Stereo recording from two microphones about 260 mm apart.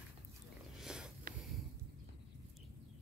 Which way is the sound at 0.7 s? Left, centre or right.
Centre.